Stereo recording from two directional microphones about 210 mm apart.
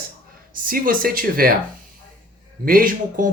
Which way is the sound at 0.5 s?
40° right (ahead or behind).